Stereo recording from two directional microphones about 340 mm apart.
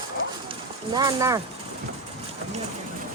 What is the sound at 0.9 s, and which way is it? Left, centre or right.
Speech, centre.